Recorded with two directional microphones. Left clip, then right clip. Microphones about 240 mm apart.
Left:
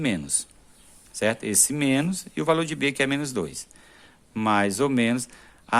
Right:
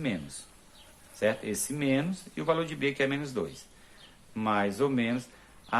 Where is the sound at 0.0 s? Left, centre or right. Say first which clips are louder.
Left 7 dB; left.